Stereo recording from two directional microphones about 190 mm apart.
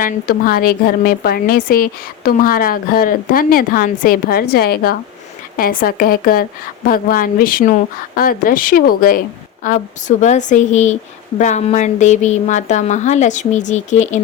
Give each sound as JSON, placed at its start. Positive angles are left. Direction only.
{"t": 0.0, "sound": "a woman's voice", "side_deg": 50}